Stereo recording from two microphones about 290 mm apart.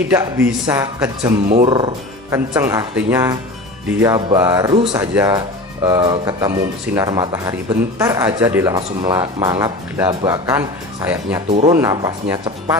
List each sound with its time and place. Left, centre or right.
0.1 s speech: centre
1.5 s speech: right